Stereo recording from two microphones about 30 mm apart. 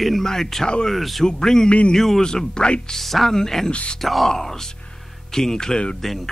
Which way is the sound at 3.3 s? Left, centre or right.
Centre.